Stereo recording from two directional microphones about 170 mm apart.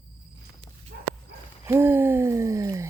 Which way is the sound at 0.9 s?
70° right (ahead or behind).